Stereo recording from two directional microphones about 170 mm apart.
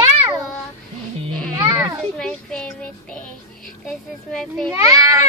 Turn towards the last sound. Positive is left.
turn(degrees=-20)  # may be behind; listen again after turning